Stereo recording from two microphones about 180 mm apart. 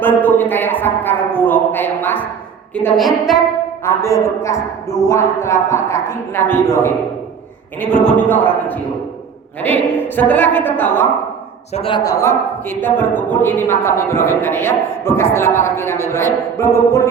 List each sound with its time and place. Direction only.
0.0 s a woman's voice: 10° left (ahead or behind)
3.8 s a woman's voice: 15° left (ahead or behind)
11.7 s a woman's voice: 30° left (ahead or behind)